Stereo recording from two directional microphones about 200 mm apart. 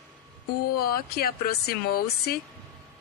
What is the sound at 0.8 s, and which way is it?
A woman's voice, 50° left (ahead or behind).